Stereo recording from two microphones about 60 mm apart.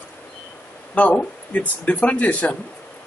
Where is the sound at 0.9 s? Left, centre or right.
Left.